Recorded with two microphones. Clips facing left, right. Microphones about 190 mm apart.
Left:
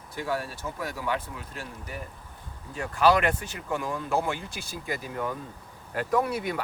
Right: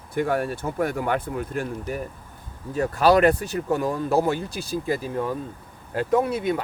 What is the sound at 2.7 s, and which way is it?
Speech, 40° right (ahead or behind).